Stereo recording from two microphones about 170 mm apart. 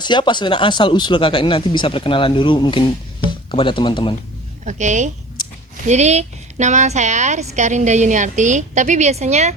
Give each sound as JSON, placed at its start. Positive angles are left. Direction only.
{"t": 0.0, "sound": "speech", "side_deg": 25}
{"t": 4.6, "sound": "a woman's voice", "side_deg": -45}